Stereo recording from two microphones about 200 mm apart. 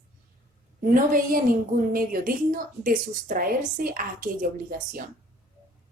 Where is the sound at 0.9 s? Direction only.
45° right (ahead or behind).